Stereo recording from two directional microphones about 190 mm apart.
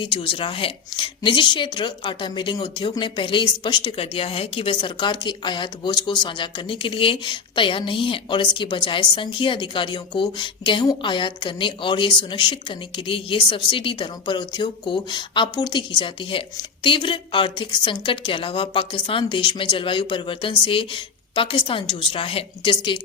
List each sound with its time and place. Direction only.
0.0 s a woman's voice: 25° left (ahead or behind)